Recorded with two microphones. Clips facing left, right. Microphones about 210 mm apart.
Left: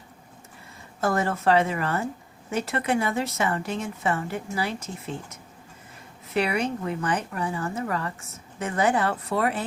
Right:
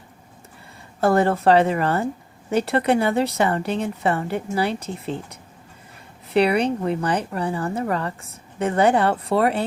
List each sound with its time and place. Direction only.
1.0 s a woman's voice: 30° right (ahead or behind)